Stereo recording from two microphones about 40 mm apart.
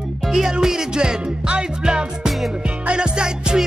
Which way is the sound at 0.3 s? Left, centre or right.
Centre.